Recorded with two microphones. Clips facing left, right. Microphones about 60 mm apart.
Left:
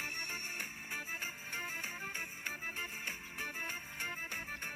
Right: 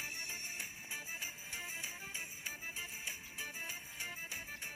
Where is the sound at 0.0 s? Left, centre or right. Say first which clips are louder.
Left 4 dB; left.